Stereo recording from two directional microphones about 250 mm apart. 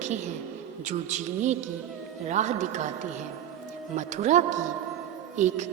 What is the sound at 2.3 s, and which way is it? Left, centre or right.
Speech, right.